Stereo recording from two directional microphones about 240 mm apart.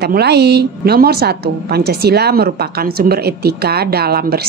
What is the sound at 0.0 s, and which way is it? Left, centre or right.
A woman's voice, right.